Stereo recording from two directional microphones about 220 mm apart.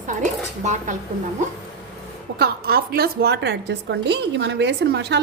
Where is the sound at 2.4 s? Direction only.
45° right (ahead or behind).